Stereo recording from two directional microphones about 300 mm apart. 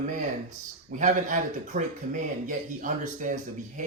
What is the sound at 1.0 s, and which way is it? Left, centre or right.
Speech, right.